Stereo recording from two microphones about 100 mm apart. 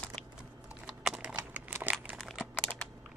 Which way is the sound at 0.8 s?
5° right (ahead or behind).